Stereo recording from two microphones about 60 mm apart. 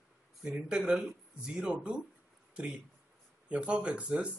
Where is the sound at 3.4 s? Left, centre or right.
Centre.